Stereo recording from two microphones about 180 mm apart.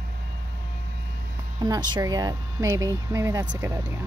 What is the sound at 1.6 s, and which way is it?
A woman's voice, 20° right (ahead or behind).